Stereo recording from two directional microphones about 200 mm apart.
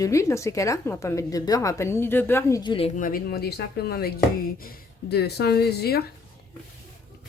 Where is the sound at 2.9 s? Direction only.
45° left (ahead or behind).